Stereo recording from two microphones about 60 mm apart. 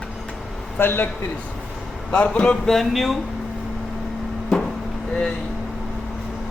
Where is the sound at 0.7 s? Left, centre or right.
Left.